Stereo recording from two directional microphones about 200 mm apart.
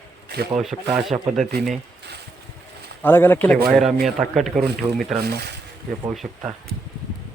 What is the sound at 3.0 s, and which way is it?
A man's voice, 10° left (ahead or behind).